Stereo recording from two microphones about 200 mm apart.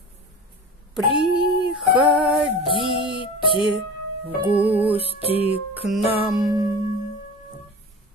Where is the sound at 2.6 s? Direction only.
25° right (ahead or behind).